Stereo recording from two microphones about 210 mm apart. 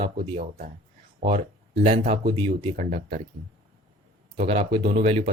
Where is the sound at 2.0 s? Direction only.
25° right (ahead or behind).